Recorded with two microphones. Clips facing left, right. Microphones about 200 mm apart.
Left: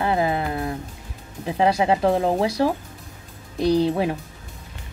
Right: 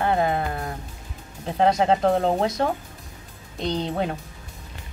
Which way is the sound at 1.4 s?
15° left (ahead or behind).